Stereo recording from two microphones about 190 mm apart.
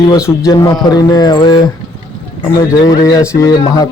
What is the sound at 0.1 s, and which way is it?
Speech, 20° left (ahead or behind).